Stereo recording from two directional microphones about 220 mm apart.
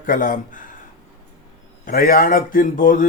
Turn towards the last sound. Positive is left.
turn(degrees=35)  # may be behind; listen again after turning